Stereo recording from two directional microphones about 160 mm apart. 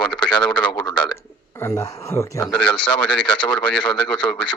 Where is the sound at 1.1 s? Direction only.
20° left (ahead or behind).